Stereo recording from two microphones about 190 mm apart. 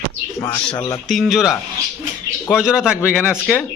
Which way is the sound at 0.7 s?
20° left (ahead or behind).